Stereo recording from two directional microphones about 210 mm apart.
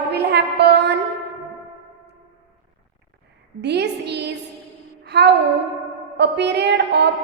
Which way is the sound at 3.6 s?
55° right (ahead or behind).